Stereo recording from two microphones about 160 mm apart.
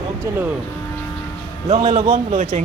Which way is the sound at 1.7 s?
45° right (ahead or behind).